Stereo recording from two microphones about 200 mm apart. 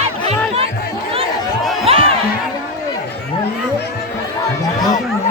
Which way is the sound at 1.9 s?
30° right (ahead or behind).